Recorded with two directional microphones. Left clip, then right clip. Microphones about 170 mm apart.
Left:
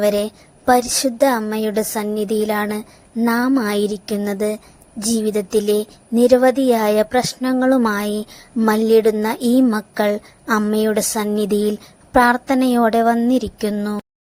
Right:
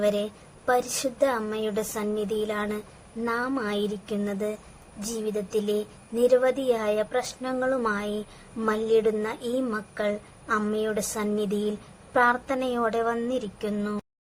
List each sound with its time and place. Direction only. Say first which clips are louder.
0.0 s a woman's voice: left 8 dB; 40° left (ahead or behind)